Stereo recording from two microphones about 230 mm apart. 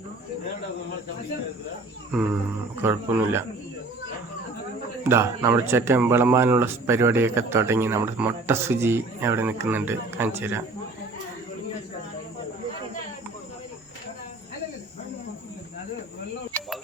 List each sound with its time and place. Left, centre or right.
2.8 s speech: centre
5.0 s speech: centre
16.5 s a sound: centre